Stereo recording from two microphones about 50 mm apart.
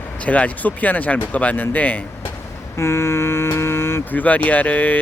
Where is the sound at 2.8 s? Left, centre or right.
Left.